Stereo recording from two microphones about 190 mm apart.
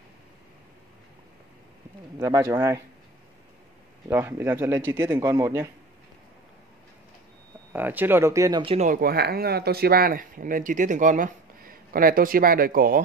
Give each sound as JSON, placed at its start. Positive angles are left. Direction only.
{"t": 2.1, "sound": "speech", "side_deg": -15}
{"t": 4.1, "sound": "speech", "side_deg": -10}
{"t": 7.7, "sound": "speech", "side_deg": -10}
{"t": 8.7, "sound": "speech", "side_deg": -45}